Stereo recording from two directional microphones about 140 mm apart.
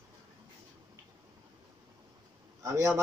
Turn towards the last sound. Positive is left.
turn(degrees=-20)  # may be behind; listen again after turning